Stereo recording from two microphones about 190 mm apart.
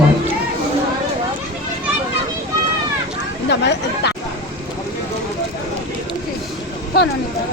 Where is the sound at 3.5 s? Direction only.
65° left (ahead or behind).